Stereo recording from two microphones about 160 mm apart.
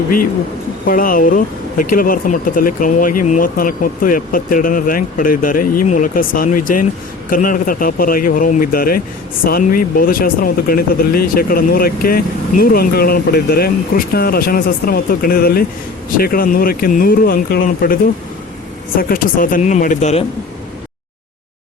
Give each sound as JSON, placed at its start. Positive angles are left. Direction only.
{"t": 0.9, "sound": "speech", "side_deg": 60}